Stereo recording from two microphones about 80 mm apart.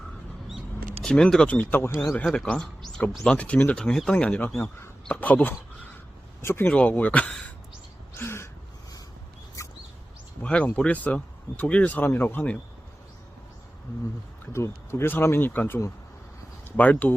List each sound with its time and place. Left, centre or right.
1.0 s speech: centre; by 6.7 s left
6.7 s speech: centre
8.1 s gasp: left
10.4 s speech: centre
14.5 s speech: left